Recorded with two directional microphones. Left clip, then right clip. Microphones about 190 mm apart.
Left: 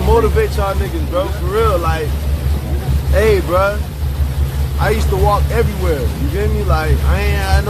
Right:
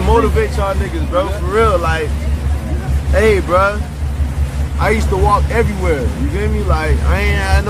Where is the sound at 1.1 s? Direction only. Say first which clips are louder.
Right 2 dB; 15° right (ahead or behind).